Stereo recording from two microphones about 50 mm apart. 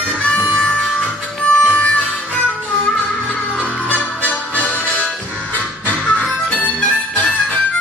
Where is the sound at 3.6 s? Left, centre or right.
Left.